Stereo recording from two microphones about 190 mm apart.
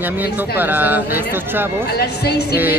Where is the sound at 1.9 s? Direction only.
60° left (ahead or behind).